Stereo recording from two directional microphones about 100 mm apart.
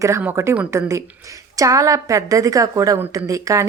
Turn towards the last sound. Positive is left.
turn(degrees=-35)  # may be behind; listen again after turning